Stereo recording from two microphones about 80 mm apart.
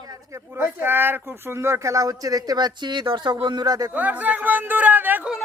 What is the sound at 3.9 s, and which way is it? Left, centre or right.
Speech, centre.